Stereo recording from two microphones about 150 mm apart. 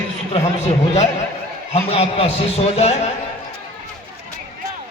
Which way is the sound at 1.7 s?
45° left (ahead or behind).